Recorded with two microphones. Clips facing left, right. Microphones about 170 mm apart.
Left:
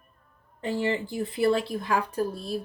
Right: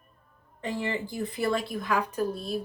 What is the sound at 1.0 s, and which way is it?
Speech, 40° right (ahead or behind).